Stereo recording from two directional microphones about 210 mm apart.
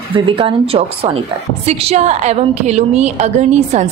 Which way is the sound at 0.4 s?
25° right (ahead or behind).